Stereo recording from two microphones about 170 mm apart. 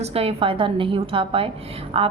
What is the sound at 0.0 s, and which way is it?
A woman's voice, 35° right (ahead or behind).